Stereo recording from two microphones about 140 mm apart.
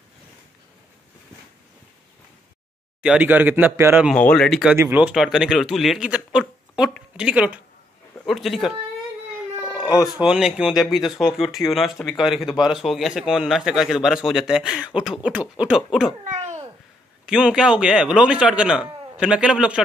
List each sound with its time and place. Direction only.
3.0 s a man's voice: 10° right (ahead or behind)
4.1 s speech: 5° left (ahead or behind)
4.7 s speech: 15° right (ahead or behind)
9.8 s a sound: 25° left (ahead or behind)
10.0 s speech: 5° right (ahead or behind)
16.3 s babbling: 60° right (ahead or behind)
17.3 s a man's voice: 5° right (ahead or behind)